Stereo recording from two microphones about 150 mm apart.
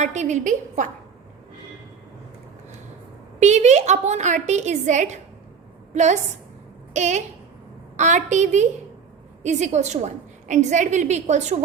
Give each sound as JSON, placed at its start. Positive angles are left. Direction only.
{"t": 0.0, "sound": "a woman's voice", "side_deg": -50}
{"t": 3.4, "sound": "a woman's voice", "side_deg": -50}